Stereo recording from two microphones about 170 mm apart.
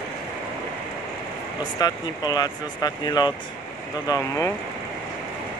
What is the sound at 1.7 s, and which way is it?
Speech, 25° left (ahead or behind).